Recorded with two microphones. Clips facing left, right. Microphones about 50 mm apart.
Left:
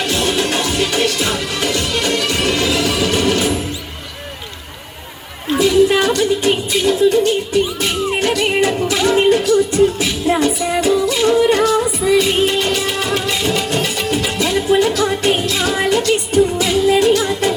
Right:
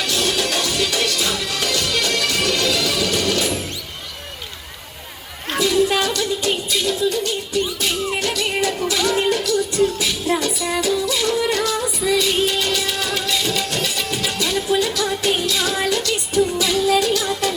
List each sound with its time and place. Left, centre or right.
0.0 s music: left
5.5 s music: left